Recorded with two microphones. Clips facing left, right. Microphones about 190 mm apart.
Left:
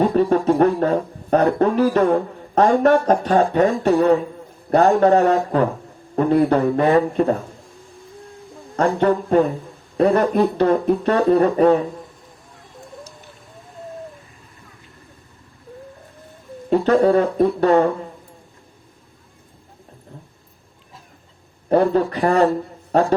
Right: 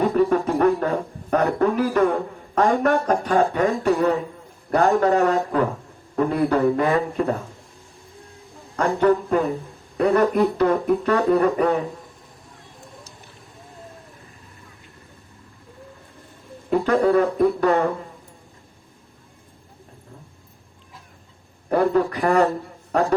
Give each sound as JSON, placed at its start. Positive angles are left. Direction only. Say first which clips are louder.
{"t": 0.3, "sound": "a sound", "louder": "left 3 dB", "side_deg": 30}
{"t": 1.3, "sound": "a man's voice", "louder": "left 3 dB", "side_deg": 30}
{"t": 8.7, "sound": "speech", "louder": "left 1 dB", "side_deg": 30}
{"t": 16.6, "sound": "speech", "louder": "left 3 dB", "side_deg": 30}
{"t": 21.7, "sound": "a man's voice", "louder": "left 3 dB", "side_deg": 30}